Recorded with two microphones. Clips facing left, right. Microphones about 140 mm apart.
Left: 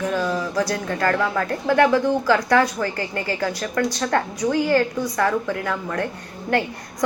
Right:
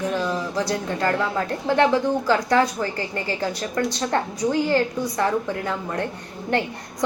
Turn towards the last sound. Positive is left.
turn(degrees=-20)  # may be behind; listen again after turning